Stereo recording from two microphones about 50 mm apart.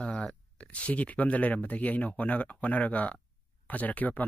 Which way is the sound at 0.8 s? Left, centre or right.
Left.